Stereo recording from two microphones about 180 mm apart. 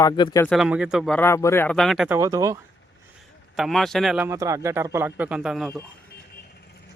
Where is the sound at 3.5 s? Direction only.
Centre (ahead or behind).